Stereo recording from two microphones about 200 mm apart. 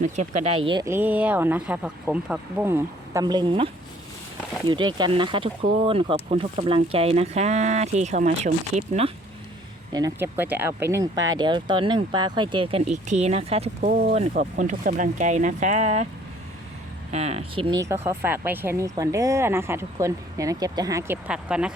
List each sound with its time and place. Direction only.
0.0 s speech: 35° right (ahead or behind)
0.6 s speech: 25° right (ahead or behind)
0.9 s speech: 10° right (ahead or behind)
4.7 s speech: 20° right (ahead or behind)
9.9 s speech: 15° right (ahead or behind)
12.9 s speech: 35° right (ahead or behind)
14.5 s speech: 45° right (ahead or behind)
17.1 s speech: 30° right (ahead or behind); by 21.2 s 15° right (ahead or behind)
21.2 s speech: 5° right (ahead or behind)